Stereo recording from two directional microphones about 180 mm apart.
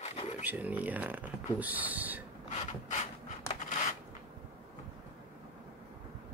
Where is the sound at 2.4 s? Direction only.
40° left (ahead or behind).